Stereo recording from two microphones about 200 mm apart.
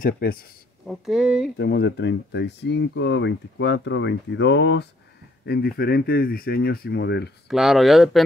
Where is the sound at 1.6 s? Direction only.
55° left (ahead or behind).